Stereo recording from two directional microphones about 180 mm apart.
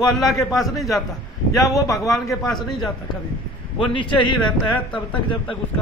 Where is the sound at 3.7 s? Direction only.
25° left (ahead or behind).